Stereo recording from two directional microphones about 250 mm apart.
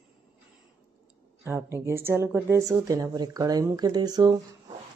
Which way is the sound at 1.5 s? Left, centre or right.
Centre.